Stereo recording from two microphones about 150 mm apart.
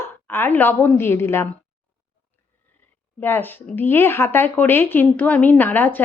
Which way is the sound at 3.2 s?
15° left (ahead or behind).